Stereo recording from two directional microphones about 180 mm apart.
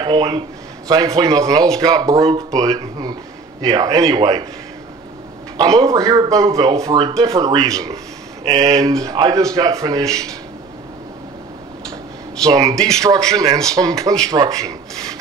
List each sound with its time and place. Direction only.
0.0 s a man's voice: 25° right (ahead or behind)
5.6 s speech: 20° right (ahead or behind)
12.4 s speech: 20° right (ahead or behind)
12.7 s speech: 5° left (ahead or behind)
13.4 s speech: 20° right (ahead or behind)